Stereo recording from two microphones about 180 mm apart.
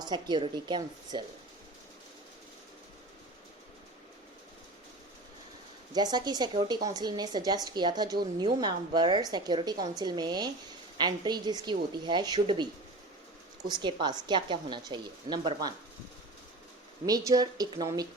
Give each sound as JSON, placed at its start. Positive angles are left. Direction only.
{"t": 0.0, "sound": "a woman's voice", "side_deg": -25}
{"t": 5.9, "sound": "a woman's voice", "side_deg": -25}
{"t": 13.7, "sound": "a woman's voice", "side_deg": -25}
{"t": 17.1, "sound": "a woman's voice", "side_deg": -20}